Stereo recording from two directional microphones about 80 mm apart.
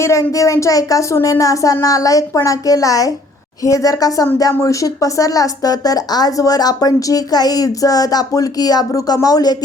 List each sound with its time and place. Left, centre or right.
0.0 s speech: left